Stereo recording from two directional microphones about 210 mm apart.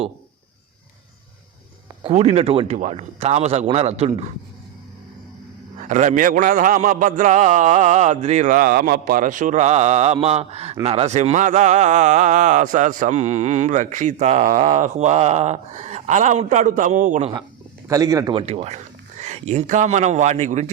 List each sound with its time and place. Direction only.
2.0 s speech: 30° right (ahead or behind)
5.7 s speech: 35° right (ahead or behind)
17.8 s speech: 15° right (ahead or behind); by 20.7 s 35° right (ahead or behind)